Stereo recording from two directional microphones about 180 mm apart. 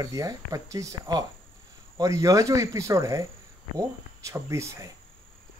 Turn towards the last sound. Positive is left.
turn(degrees=-15)  # may be behind; listen again after turning